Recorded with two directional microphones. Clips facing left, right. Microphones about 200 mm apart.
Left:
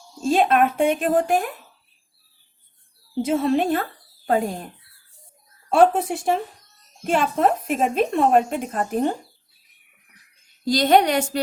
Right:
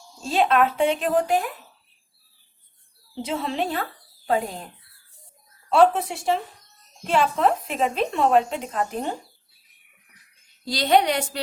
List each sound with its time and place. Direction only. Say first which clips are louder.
0.3 s a woman's voice: left 2 dB; 50° left (ahead or behind)
3.2 s a woman's voice: left 7 dB; 50° left (ahead or behind)
5.6 s a woman's voice: left 1 dB; 50° left (ahead or behind)
10.7 s a woman's voice: left 3 dB; 45° left (ahead or behind)